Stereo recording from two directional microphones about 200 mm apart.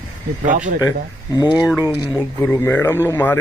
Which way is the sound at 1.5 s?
5° right (ahead or behind).